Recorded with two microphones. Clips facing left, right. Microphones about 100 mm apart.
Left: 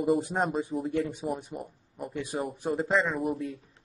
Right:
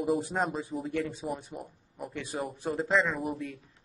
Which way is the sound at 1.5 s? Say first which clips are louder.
Left 3 dB; centre (ahead or behind).